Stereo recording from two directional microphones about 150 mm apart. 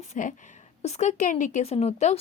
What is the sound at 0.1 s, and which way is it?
A woman's voice, 55° left (ahead or behind).